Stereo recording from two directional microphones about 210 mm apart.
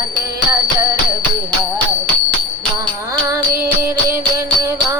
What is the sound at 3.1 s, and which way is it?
Music, 15° right (ahead or behind).